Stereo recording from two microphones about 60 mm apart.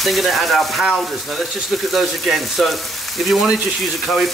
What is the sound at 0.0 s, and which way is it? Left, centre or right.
Speech, centre.